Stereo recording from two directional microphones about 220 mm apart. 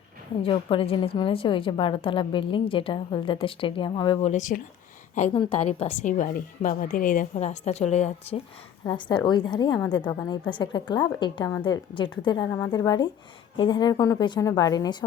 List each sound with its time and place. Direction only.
0.4 s a woman's voice: 25° left (ahead or behind)